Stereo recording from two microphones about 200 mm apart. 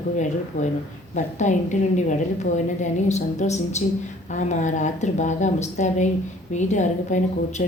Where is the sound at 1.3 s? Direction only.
35° left (ahead or behind).